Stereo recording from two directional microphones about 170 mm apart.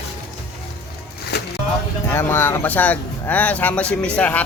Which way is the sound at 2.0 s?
15° left (ahead or behind).